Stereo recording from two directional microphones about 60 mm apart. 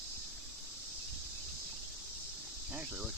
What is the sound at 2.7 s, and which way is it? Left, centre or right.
Cricket, right.